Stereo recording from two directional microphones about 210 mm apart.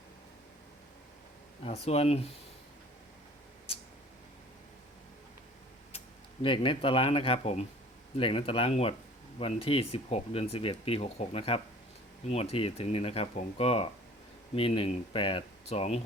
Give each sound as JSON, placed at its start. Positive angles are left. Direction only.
{"t": 1.6, "sound": "speech", "side_deg": 30}
{"t": 6.4, "sound": "speech", "side_deg": 25}